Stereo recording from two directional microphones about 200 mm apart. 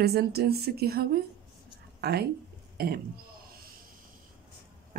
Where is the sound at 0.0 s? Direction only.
50° right (ahead or behind).